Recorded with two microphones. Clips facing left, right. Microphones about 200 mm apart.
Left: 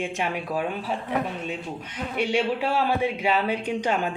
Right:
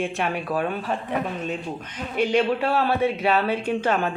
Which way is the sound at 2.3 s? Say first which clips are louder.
Right 3 dB; 10° left (ahead or behind).